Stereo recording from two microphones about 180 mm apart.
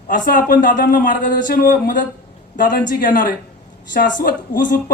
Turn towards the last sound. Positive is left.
turn(degrees=50)  # may be behind; listen again after turning